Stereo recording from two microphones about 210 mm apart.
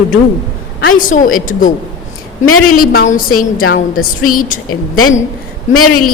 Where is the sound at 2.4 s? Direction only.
90° left.